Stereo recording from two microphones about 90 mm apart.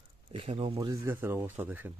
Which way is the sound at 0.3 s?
85° right.